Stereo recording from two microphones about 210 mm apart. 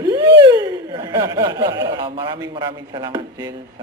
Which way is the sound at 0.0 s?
15° right (ahead or behind).